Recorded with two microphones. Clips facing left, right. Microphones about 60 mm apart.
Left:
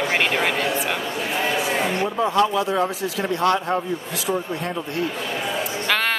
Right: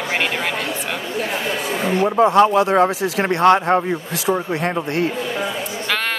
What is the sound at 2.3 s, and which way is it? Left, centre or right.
A man's voice, right.